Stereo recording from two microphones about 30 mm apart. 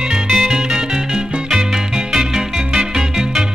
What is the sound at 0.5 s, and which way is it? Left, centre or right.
Music, right.